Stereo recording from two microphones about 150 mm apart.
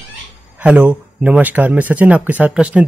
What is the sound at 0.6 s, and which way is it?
Speech, 10° right (ahead or behind).